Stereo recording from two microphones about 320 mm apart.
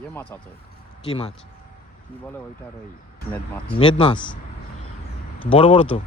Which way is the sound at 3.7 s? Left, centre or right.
Centre.